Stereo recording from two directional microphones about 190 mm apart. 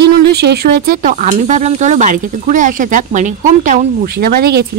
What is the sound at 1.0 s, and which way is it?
Speech, 40° right (ahead or behind).